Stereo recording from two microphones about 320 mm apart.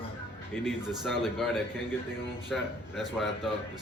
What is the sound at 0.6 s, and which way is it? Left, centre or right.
Speech, centre.